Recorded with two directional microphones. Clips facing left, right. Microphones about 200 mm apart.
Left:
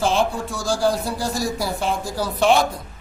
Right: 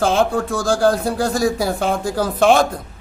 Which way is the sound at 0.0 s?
55° right (ahead or behind).